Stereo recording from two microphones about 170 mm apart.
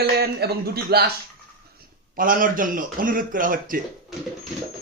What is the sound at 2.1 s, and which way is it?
A man's voice, 55° right (ahead or behind).